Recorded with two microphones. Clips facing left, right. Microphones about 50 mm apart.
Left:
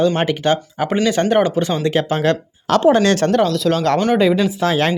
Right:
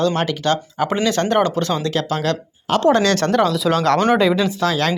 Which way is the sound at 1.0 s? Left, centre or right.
Centre.